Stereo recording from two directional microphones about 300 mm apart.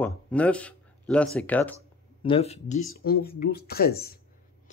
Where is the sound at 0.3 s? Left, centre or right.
Centre.